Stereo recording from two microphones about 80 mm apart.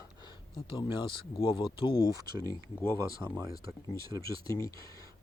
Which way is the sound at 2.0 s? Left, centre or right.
Right.